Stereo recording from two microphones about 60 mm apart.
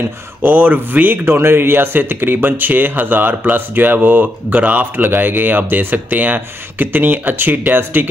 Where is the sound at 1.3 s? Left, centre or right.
Right.